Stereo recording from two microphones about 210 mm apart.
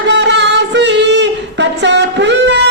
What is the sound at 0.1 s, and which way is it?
Singing, 55° right (ahead or behind).